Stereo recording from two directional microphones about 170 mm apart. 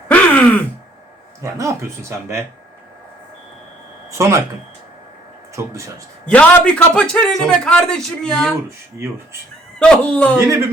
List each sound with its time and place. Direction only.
0.1 s gasp: 5° left (ahead or behind)
1.4 s speech: 15° right (ahead or behind)
4.2 s speech: 15° right (ahead or behind)
6.3 s a man's voice: 5° left (ahead or behind)
9.7 s a man's voice: 5° left (ahead or behind)